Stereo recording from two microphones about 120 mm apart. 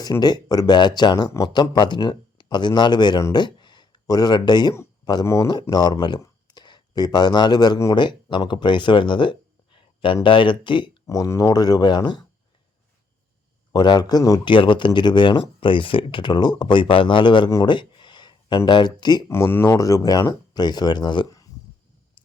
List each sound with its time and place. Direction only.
0.0 s speech: 35° left (ahead or behind)
5.2 s speech: 25° left (ahead or behind)
5.7 s speech: 35° left (ahead or behind)
11.0 s speech: 25° left (ahead or behind)
13.7 s speech: 35° left (ahead or behind)
19.3 s speech: 20° left (ahead or behind)